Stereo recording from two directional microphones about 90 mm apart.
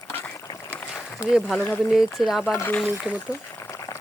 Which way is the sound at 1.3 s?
Centre (ahead or behind).